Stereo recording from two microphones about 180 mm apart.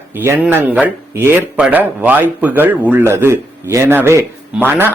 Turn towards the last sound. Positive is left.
turn(degrees=-10)  # may be behind; listen again after turning